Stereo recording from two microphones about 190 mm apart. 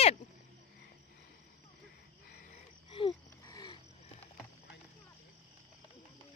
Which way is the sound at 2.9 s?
25° left (ahead or behind).